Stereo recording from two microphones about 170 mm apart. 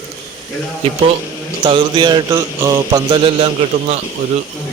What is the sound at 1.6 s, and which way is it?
Speech, 25° right (ahead or behind).